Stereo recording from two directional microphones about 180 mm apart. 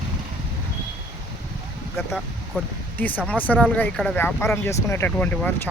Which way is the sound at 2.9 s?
10° left (ahead or behind).